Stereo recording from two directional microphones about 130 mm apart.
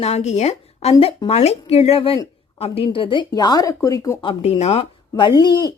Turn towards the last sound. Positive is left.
turn(degrees=30)  # may be behind; listen again after turning